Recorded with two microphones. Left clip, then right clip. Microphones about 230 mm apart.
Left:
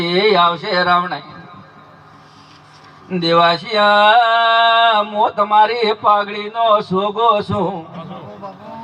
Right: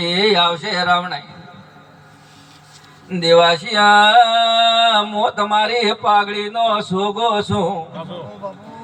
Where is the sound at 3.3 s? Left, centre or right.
Left.